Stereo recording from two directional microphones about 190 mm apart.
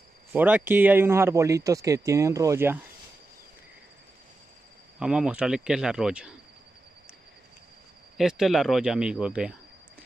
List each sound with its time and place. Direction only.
0.3 s speech: 10° right (ahead or behind)
4.9 s speech: 5° right (ahead or behind)
8.2 s speech: centre (ahead or behind)